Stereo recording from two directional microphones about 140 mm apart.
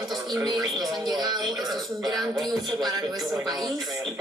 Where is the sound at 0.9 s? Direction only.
30° right (ahead or behind).